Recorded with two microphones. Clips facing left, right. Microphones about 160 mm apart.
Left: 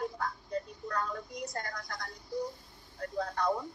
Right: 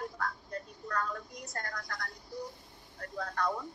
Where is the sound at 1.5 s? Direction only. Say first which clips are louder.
Left 1 dB; 15° left (ahead or behind).